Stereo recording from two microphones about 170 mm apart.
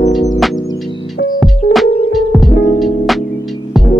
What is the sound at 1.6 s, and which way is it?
Music, 55° left (ahead or behind).